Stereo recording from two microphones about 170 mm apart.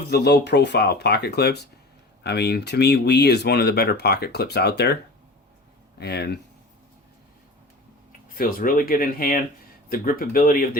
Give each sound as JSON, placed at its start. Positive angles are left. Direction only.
{"t": 0.0, "sound": "speech", "side_deg": 75}
{"t": 6.0, "sound": "speech", "side_deg": 70}
{"t": 8.4, "sound": "speech", "side_deg": 55}